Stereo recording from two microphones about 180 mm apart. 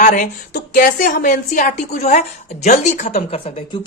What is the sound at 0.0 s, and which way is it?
A woman's voice, 45° left (ahead or behind).